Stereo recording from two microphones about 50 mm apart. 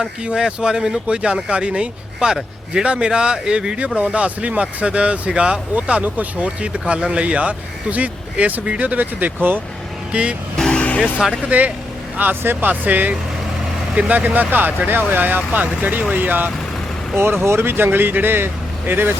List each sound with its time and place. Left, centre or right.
0.3 s speech: centre
5.7 s speech: right
10.1 s speech: right
10.8 s vehicle: left
11.4 s speech: right
17.2 s speech: right